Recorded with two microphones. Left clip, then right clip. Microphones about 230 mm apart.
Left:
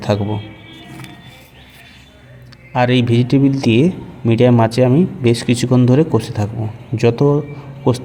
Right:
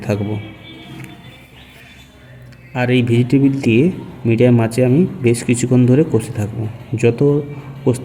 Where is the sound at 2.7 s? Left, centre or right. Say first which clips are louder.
Left 2 dB; centre.